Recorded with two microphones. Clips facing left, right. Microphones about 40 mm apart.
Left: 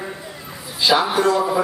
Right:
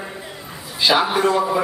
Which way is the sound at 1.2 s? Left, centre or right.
Right.